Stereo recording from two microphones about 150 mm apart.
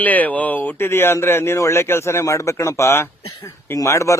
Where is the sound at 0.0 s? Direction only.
10° left (ahead or behind).